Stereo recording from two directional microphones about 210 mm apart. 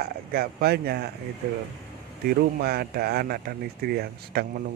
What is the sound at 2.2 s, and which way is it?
Speech, 50° right (ahead or behind).